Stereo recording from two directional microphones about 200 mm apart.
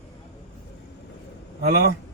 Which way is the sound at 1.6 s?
50° right (ahead or behind).